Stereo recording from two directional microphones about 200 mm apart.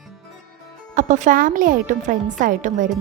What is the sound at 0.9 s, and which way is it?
A woman's voice, 40° right (ahead or behind).